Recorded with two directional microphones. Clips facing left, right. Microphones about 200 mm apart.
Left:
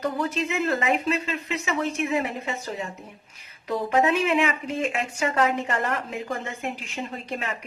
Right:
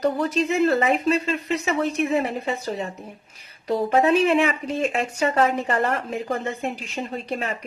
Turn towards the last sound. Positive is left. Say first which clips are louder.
# right 4 dB
turn(degrees=-35)  # may be behind; listen again after turning